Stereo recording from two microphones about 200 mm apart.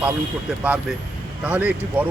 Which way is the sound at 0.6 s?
5° right (ahead or behind).